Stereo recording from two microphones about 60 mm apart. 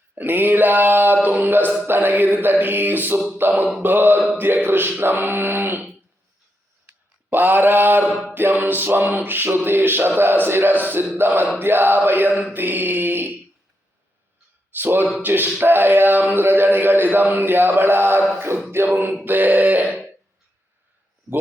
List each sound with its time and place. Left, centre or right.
0.2 s a man's voice: right
7.3 s a man's voice: right
14.7 s a man's voice: right
19.2 s mantra: right
19.8 s throat clearing: centre